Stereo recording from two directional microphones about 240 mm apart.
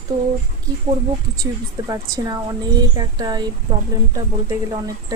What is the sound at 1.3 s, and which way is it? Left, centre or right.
A woman's voice, centre.